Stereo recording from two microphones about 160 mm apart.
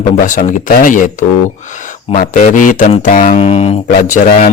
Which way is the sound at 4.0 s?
55° left (ahead or behind).